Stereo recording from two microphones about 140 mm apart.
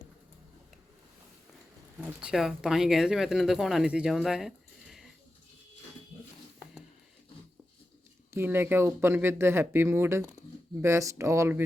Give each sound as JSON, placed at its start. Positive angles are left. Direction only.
{"t": 2.0, "sound": "speech", "side_deg": -5}
{"t": 8.3, "sound": "speech", "side_deg": -15}